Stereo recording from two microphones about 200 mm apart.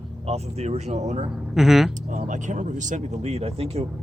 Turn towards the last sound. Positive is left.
turn(degrees=-30)  # may be behind; listen again after turning